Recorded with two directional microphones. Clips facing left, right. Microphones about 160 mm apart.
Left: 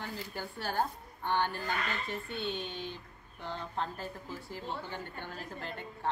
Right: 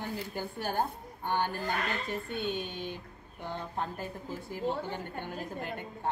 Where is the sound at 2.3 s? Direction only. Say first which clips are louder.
Right 3 dB; 50° right (ahead or behind).